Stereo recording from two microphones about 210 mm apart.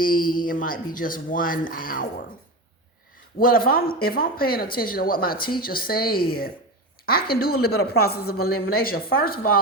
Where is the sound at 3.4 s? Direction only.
45° left (ahead or behind).